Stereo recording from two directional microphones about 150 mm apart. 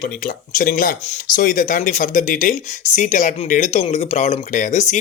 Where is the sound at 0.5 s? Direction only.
70° left (ahead or behind).